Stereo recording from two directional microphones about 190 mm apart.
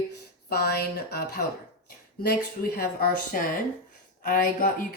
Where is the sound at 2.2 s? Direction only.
55° left (ahead or behind).